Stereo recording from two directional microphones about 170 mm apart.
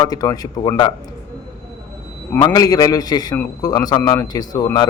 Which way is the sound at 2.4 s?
20° left (ahead or behind).